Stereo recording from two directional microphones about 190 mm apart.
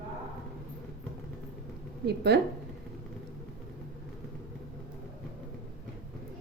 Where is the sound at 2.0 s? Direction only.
60° right (ahead or behind).